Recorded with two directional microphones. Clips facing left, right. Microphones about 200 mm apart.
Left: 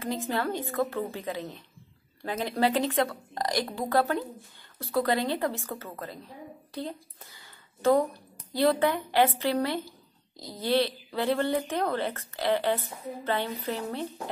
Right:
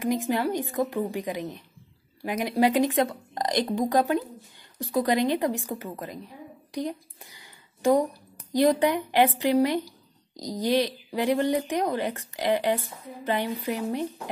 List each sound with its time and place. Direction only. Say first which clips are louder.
0.0 s a woman's voice: right 5 dB; 15° right (ahead or behind)